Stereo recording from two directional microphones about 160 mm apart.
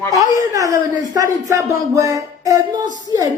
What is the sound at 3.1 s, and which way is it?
Speech, 20° left (ahead or behind).